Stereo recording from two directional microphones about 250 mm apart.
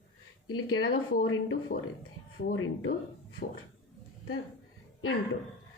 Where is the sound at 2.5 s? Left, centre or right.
Left.